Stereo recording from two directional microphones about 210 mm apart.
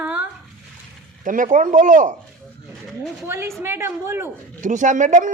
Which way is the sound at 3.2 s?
10° right (ahead or behind).